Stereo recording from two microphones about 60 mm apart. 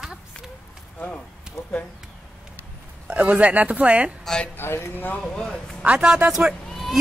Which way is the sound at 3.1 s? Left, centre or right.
Right.